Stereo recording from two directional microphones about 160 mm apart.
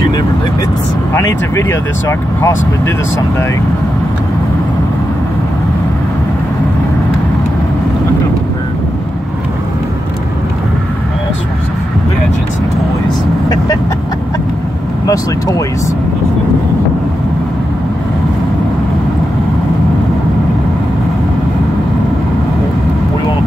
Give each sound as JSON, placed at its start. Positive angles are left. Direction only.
{"t": 1.1, "sound": "speech", "side_deg": 15}
{"t": 15.0, "sound": "speech", "side_deg": 20}